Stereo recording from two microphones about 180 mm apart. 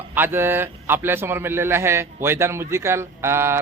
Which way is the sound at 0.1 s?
10° right (ahead or behind).